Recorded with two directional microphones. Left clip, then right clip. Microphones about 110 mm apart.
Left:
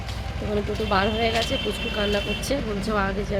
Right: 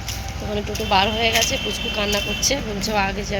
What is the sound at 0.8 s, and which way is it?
Speech, 30° left (ahead or behind).